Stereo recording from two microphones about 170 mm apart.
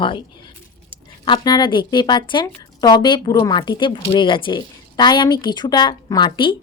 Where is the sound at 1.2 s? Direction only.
25° left (ahead or behind).